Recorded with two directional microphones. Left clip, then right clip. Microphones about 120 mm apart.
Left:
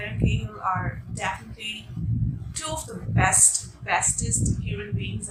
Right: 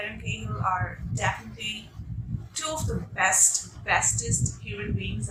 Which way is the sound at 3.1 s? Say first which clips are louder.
Left 1 dB; 15° left (ahead or behind).